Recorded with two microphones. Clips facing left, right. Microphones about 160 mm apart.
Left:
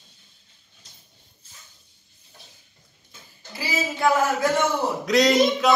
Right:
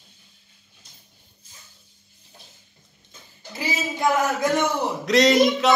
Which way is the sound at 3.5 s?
20° right (ahead or behind).